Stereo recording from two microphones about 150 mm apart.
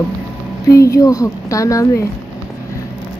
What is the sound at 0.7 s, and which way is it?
Speech, 20° left (ahead or behind).